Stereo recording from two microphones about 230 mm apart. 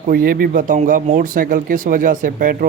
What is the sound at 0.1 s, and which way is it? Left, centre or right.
Speech, right.